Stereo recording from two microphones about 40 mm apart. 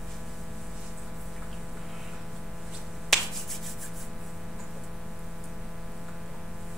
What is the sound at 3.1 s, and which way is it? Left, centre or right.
Finger snapping, centre.